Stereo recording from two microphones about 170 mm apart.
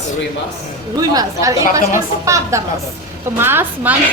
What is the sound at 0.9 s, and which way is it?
A woman's voice, 20° right (ahead or behind).